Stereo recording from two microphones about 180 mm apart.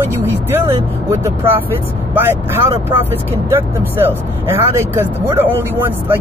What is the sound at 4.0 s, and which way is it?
Speech, 15° right (ahead or behind).